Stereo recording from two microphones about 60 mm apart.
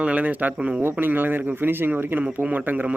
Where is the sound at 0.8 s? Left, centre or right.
Right.